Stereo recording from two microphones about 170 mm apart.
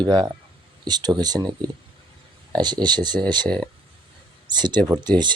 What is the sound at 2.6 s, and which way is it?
Speech, 25° right (ahead or behind).